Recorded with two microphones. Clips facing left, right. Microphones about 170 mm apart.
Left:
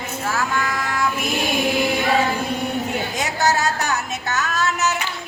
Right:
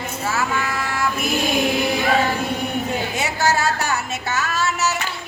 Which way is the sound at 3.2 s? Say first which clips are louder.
Left 1 dB; 5° right (ahead or behind).